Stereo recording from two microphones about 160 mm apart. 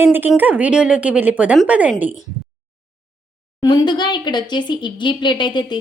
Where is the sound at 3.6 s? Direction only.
25° left (ahead or behind).